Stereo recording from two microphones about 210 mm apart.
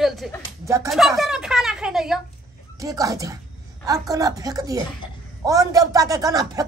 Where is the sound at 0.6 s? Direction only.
15° right (ahead or behind).